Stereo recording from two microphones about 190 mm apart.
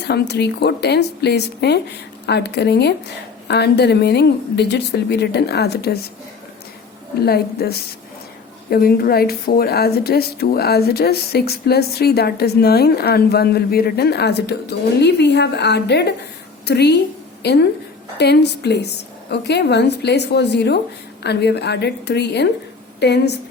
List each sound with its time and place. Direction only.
0.0 s a woman's voice: 60° left (ahead or behind)
7.3 s a woman's voice: 55° left (ahead or behind)